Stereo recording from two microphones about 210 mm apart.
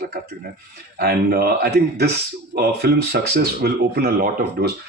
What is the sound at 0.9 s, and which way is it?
Speech, 45° right (ahead or behind).